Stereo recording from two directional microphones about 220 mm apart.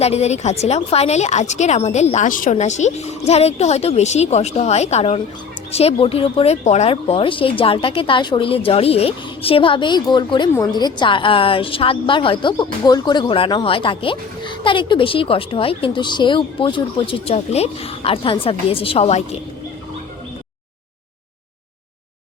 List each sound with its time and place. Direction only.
0.0 s a woman's voice: 30° left (ahead or behind)